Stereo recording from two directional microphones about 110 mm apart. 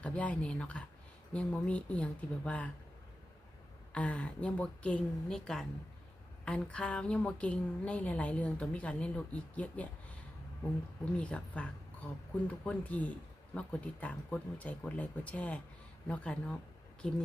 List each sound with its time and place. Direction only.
0.0 s a woman's voice: 10° left (ahead or behind)
3.9 s a woman's voice: 10° left (ahead or behind)
11.2 s a woman's voice: 10° left (ahead or behind)